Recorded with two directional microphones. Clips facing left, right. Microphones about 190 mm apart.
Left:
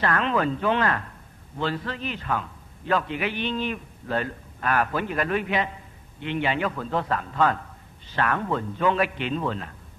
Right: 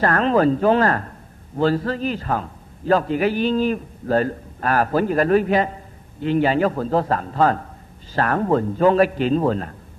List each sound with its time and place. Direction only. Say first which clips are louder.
0.0 s a man's voice: right 7 dB; 40° right (ahead or behind)